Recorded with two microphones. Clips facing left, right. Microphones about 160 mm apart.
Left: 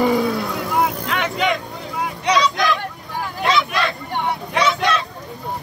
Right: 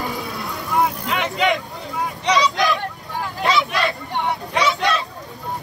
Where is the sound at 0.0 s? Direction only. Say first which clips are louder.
Left 10 dB; 75° left (ahead or behind).